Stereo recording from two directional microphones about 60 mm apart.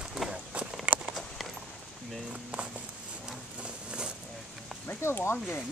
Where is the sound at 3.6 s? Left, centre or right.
Centre.